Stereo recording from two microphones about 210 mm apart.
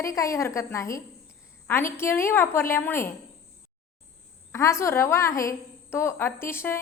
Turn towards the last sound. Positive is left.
turn(degrees=10)  # may be behind; listen again after turning